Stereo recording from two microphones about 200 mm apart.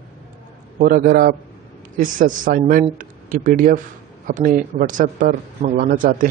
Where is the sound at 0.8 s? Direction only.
40° right (ahead or behind).